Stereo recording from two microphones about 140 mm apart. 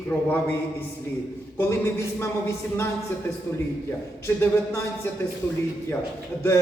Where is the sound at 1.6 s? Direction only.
20° left (ahead or behind).